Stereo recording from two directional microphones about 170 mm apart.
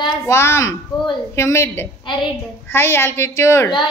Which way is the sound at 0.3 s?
15° left (ahead or behind).